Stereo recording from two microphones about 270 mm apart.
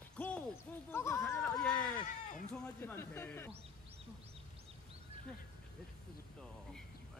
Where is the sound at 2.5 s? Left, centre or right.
Centre.